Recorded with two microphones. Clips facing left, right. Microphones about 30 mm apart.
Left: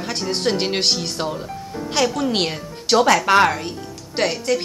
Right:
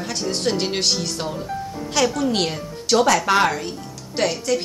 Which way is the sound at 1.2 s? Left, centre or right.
Centre.